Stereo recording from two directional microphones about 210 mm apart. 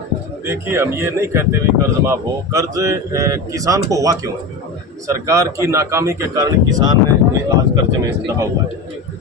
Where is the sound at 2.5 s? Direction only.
15° right (ahead or behind).